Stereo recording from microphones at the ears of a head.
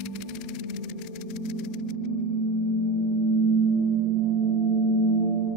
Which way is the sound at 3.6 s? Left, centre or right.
Right.